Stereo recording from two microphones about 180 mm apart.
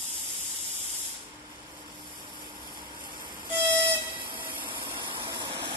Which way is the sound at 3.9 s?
25° right (ahead or behind).